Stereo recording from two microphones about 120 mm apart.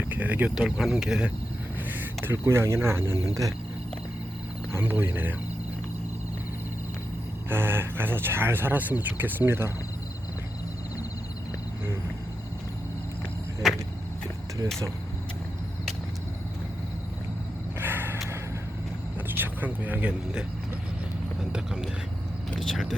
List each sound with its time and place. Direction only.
0.1 s speech: 15° right (ahead or behind)
0.6 s speech: centre (ahead or behind)
1.9 s speech: 20° right (ahead or behind)
4.7 s speech: 20° right (ahead or behind)
7.5 s speech: 20° right (ahead or behind)
13.6 s vehicle: centre (ahead or behind)
17.7 s a sound: 20° right (ahead or behind)
19.3 s speech: 15° right (ahead or behind)
21.5 s speech: 5° right (ahead or behind)